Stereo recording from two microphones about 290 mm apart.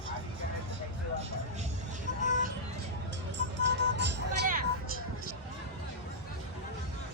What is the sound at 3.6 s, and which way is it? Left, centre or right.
Vehicle, right.